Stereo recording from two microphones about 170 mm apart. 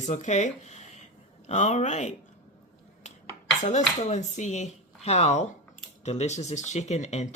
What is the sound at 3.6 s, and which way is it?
Speech, 45° left (ahead or behind).